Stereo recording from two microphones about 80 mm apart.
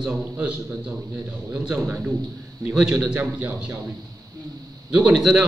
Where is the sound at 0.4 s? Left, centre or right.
Right.